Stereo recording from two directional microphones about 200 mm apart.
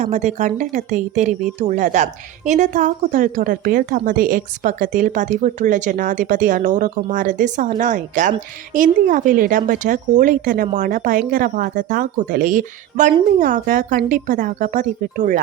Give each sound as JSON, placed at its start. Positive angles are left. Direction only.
{"t": 0.0, "sound": "a woman's voice", "side_deg": -35}